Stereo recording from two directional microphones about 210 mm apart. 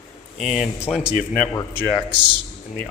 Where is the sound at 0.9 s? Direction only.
Centre (ahead or behind).